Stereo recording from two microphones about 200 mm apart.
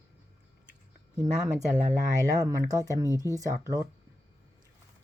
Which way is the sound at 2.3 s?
15° right (ahead or behind).